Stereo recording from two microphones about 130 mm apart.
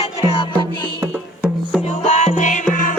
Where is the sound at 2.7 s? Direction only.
90° left.